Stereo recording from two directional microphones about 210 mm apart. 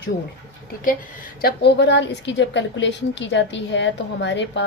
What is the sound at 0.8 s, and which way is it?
A woman's voice, 40° left (ahead or behind).